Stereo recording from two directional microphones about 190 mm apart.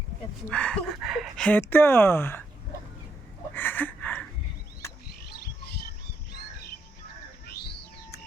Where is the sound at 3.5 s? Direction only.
10° left (ahead or behind).